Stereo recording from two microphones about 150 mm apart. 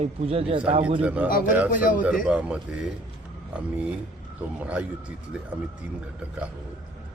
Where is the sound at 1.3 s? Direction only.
70° left (ahead or behind).